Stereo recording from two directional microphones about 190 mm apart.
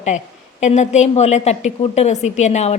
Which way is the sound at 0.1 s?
40° left (ahead or behind).